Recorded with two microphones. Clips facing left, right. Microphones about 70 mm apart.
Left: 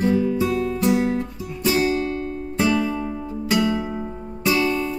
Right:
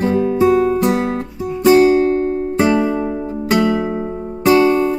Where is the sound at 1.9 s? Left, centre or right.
Right.